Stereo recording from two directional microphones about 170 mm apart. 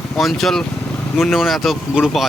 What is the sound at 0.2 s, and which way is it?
Speech, centre (ahead or behind).